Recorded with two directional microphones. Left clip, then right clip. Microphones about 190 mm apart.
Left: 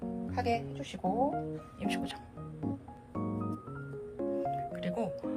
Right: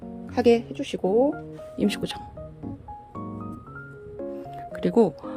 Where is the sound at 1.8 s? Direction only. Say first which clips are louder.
Right 10 dB; 35° right (ahead or behind).